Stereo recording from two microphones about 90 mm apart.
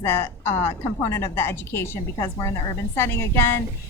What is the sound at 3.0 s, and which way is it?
Speech, 30° left (ahead or behind).